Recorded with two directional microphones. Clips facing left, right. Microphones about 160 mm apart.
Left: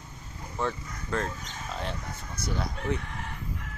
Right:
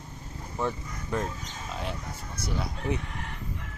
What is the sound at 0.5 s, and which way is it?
Speech, 15° right (ahead or behind).